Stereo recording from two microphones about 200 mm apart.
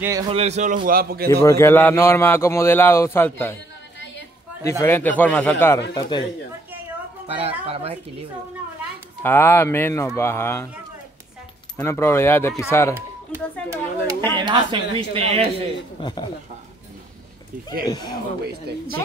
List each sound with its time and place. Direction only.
0.0 s a man's voice: 15° right (ahead or behind)
0.3 s a man's voice: 30° right (ahead or behind); by 1.3 s 50° right (ahead or behind)
1.4 s speech: 15° left (ahead or behind)
4.6 s speech: 15° left (ahead or behind)
5.9 s speech: 20° left (ahead or behind)
7.2 s speech: 30° right (ahead or behind)
9.2 s speech: 10° left (ahead or behind)
11.7 s speech: 15° left (ahead or behind)
12.9 s a sound: 15° right (ahead or behind)
14.3 s speech: 25° right (ahead or behind)
16.0 s speech: 20° left (ahead or behind)
17.8 s speech: 20° left (ahead or behind)